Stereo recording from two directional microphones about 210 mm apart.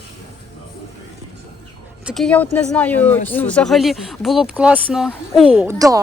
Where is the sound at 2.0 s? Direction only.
5° left (ahead or behind).